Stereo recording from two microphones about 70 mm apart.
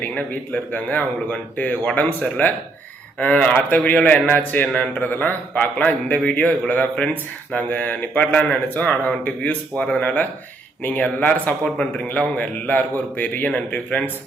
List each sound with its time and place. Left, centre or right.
0.1 s a man's voice: left